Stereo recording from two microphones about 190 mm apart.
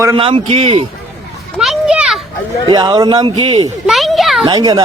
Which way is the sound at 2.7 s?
20° right (ahead or behind).